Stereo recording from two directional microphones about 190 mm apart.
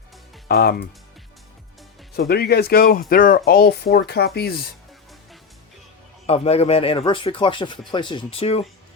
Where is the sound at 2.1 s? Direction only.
55° left (ahead or behind).